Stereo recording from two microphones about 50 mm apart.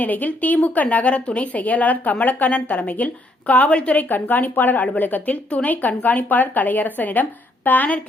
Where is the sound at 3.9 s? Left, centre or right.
Left.